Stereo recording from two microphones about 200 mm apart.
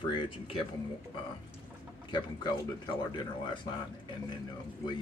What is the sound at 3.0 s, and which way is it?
Speech, 20° left (ahead or behind).